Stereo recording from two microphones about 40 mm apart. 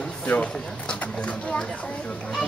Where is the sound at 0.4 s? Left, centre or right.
Left.